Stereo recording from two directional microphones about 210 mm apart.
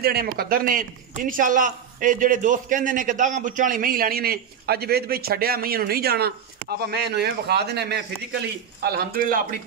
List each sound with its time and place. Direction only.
0.0 s a man's voice: 45° right (ahead or behind)